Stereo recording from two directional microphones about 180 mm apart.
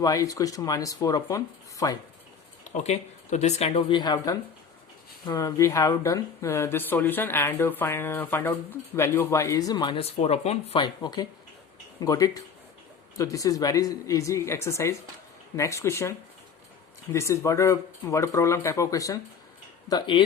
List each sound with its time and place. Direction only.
0.0 s speech: 20° left (ahead or behind)
2.6 s speech: 40° left (ahead or behind)